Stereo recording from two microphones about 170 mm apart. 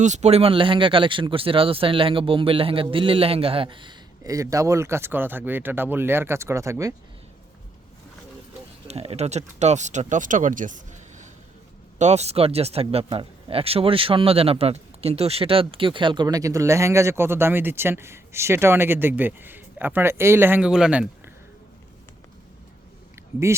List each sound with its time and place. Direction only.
0.0 s speech: 40° right (ahead or behind); by 6.9 s 20° right (ahead or behind)
8.9 s speech: 40° right (ahead or behind); by 21.1 s 5° right (ahead or behind)